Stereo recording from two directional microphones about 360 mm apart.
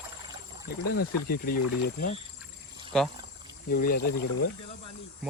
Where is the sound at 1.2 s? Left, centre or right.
Left.